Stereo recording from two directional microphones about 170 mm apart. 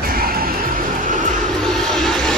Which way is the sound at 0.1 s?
60° right (ahead or behind).